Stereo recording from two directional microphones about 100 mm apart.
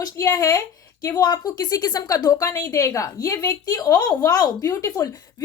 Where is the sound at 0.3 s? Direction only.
35° left (ahead or behind).